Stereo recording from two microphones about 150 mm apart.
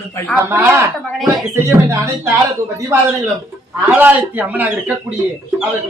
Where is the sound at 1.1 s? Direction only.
Centre (ahead or behind).